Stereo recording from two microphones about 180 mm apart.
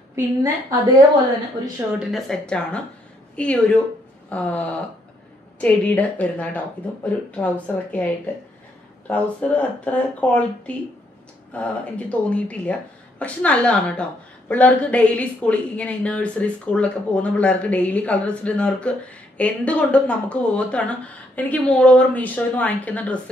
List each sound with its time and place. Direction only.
0.1 s a woman's voice: 20° right (ahead or behind)
2.0 s speech: centre (ahead or behind)
11.5 s speech: 5° left (ahead or behind)